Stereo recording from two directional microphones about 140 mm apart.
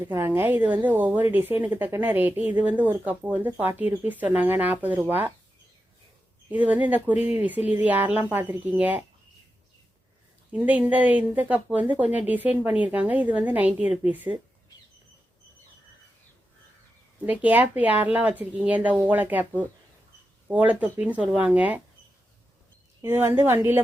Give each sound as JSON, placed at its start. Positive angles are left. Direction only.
{"t": 0.0, "sound": "a woman's voice", "side_deg": -15}
{"t": 6.5, "sound": "a woman's voice", "side_deg": -10}
{"t": 10.5, "sound": "a woman's voice", "side_deg": -10}
{"t": 17.2, "sound": "a woman's voice", "side_deg": -10}
{"t": 20.5, "sound": "a woman's voice", "side_deg": -10}
{"t": 23.0, "sound": "a woman's voice", "side_deg": -20}